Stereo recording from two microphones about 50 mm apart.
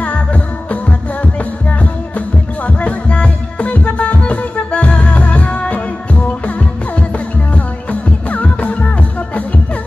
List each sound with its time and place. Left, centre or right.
0.0 s music: left
2.8 s music: left
7.5 s music: left